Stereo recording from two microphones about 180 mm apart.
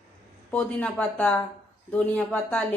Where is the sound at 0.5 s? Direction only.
5° left (ahead or behind).